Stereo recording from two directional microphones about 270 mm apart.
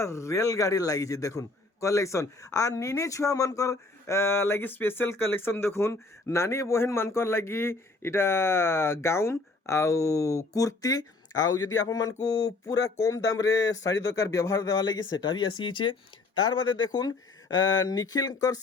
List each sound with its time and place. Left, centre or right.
0.0 s a man's voice: centre